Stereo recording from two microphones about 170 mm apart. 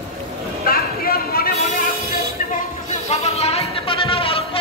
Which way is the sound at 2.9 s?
40° left (ahead or behind).